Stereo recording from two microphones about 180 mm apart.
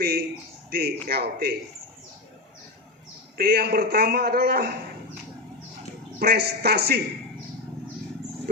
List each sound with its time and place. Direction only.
0.0 s a man's voice: 55° right (ahead or behind)
3.3 s a man's voice: 60° right (ahead or behind)
6.1 s a man's voice: 60° right (ahead or behind)